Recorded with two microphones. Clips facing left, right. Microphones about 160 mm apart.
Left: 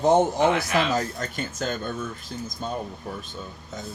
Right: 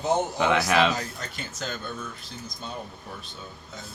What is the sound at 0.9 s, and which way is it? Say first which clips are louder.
Speech: left 7 dB; 45° left (ahead or behind).